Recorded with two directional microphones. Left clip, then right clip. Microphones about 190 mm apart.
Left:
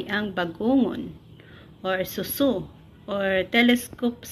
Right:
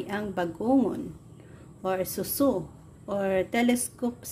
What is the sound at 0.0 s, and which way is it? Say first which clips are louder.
A woman's voice: left 4 dB; 15° right (ahead or behind).